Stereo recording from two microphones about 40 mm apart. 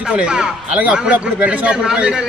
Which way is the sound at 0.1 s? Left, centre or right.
Right.